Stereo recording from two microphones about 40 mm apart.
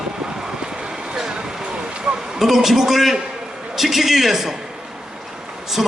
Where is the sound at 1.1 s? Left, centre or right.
Centre.